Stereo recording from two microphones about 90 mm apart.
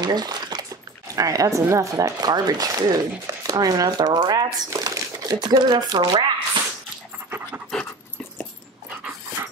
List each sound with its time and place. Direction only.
0.0 s a sound: 50° right (ahead or behind)
1.1 s speech: 40° right (ahead or behind)
7.2 s pant: 25° right (ahead or behind)